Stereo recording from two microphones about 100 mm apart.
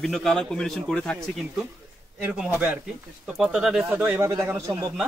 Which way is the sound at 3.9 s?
25° right (ahead or behind).